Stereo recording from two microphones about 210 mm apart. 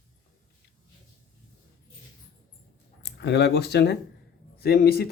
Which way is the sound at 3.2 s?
55° left (ahead or behind).